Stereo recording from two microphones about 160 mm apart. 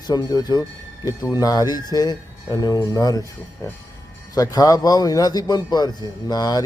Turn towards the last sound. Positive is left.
turn(degrees=25)  # may be behind; listen again after turning